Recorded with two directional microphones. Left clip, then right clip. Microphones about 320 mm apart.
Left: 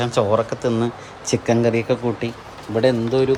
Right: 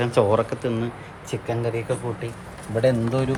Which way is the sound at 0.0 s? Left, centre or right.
Centre.